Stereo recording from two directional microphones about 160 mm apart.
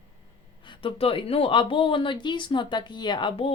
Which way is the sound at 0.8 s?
35° left (ahead or behind).